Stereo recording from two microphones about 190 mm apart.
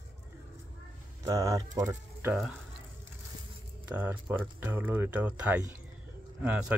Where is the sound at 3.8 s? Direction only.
10° right (ahead or behind).